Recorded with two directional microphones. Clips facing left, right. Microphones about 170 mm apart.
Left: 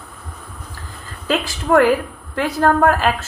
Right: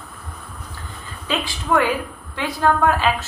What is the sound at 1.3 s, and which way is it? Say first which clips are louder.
A woman's voice: left 5 dB; 45° left (ahead or behind).